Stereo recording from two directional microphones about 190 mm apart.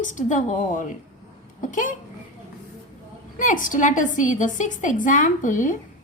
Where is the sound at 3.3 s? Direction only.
45° left (ahead or behind).